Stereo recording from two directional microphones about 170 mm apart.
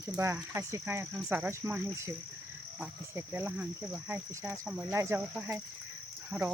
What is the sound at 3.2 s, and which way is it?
Speech, 10° right (ahead or behind).